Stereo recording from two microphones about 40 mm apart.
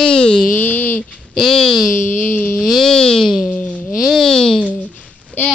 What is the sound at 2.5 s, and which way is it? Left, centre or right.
Speech, centre.